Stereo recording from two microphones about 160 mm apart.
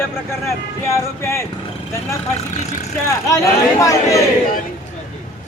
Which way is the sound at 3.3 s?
20° left (ahead or behind).